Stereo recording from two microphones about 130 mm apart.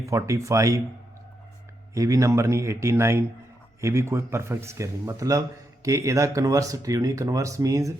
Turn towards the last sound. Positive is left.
turn(degrees=-25)  # may be behind; listen again after turning